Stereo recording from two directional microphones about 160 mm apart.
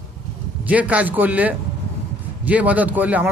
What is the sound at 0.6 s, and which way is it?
Speech, 10° right (ahead or behind).